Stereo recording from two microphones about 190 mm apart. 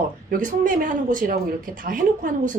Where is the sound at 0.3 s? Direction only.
45° right (ahead or behind).